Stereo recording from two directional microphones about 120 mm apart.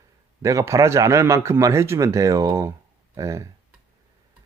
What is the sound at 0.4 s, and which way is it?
Speech, 25° right (ahead or behind).